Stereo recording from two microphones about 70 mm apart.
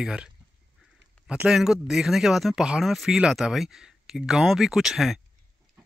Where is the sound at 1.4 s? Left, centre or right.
Centre.